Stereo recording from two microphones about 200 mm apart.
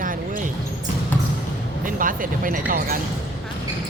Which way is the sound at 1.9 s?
45° right (ahead or behind).